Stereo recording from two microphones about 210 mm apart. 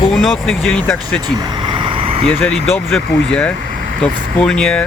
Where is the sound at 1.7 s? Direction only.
25° right (ahead or behind).